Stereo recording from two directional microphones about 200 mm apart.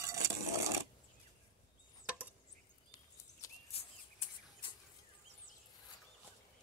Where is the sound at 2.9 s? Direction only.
15° left (ahead or behind).